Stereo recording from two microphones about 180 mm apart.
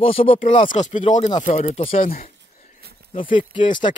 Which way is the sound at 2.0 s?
50° left (ahead or behind).